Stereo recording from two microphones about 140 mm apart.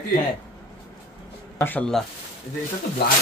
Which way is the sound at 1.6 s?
10° left (ahead or behind).